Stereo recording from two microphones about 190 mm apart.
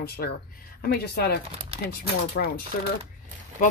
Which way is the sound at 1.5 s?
30° right (ahead or behind).